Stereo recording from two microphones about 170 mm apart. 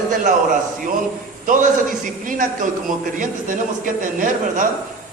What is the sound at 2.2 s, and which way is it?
A man's voice, 50° right (ahead or behind).